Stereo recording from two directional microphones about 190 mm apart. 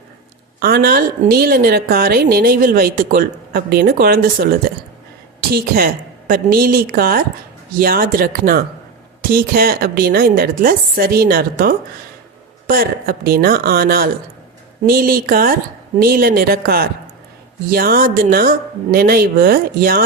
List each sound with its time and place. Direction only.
0.6 s a woman's voice: 50° right (ahead or behind)
5.5 s a woman's voice: 55° right (ahead or behind)